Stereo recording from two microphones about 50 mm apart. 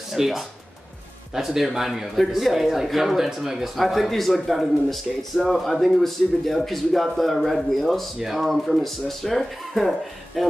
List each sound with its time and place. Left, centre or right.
0.1 s speech: centre